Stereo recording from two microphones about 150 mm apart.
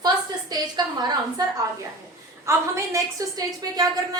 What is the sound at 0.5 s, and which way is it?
A woman's voice, 25° right (ahead or behind).